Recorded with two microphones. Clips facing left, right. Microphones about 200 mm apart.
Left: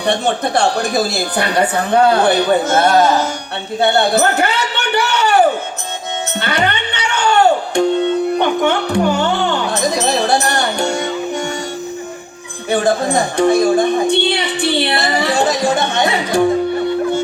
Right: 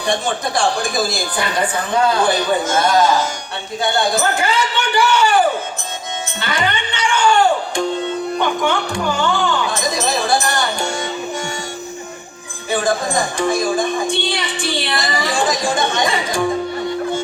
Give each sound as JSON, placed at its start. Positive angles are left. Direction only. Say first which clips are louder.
{"t": 0.0, "sound": "a man's voice", "louder": "left 4 dB", "side_deg": 65}
{"t": 6.4, "sound": "music", "louder": "left 2 dB", "side_deg": 65}
{"t": 12.7, "sound": "speech", "louder": "left 4 dB", "side_deg": 65}